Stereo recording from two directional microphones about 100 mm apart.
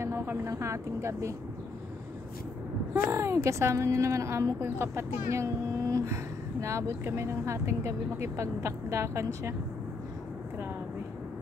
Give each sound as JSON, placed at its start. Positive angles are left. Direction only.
{"t": 0.0, "sound": "speech", "side_deg": -30}
{"t": 2.9, "sound": "speech", "side_deg": -25}